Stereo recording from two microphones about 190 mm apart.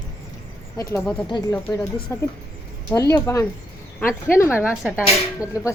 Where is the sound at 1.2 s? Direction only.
25° left (ahead or behind).